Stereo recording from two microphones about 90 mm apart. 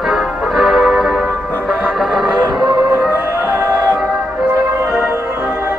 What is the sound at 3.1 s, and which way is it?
Music, 30° right (ahead or behind).